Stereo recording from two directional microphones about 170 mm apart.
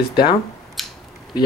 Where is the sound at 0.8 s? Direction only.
Centre (ahead or behind).